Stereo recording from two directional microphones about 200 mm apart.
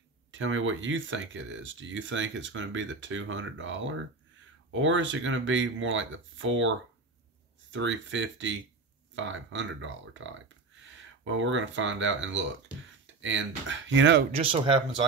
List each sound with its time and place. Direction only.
0.3 s speech: 75° right (ahead or behind)
7.7 s speech: 70° right (ahead or behind)
14.3 s speech: 25° right (ahead or behind)